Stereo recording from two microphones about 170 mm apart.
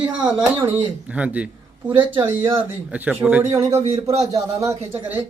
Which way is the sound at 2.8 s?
10° right (ahead or behind).